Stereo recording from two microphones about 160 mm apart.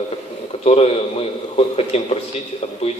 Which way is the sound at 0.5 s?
40° left (ahead or behind).